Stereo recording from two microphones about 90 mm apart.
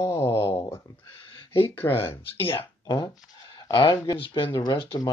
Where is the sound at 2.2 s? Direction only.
90° left.